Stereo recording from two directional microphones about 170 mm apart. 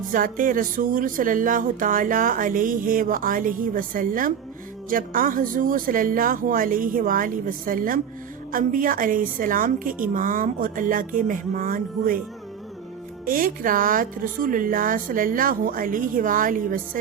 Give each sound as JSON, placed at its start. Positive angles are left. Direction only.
{"t": 0.1, "sound": "speech", "side_deg": -55}
{"t": 13.2, "sound": "speech", "side_deg": -55}